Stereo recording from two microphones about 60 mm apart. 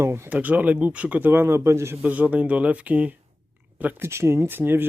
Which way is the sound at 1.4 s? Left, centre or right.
Right.